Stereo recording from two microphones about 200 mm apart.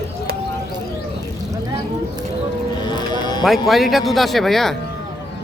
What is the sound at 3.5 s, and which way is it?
Speech, centre (ahead or behind).